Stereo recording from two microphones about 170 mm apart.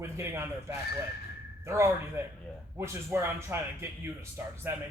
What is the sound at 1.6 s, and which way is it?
A man's voice, 15° right (ahead or behind).